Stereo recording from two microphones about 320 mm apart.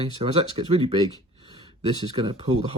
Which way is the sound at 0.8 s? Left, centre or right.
Centre.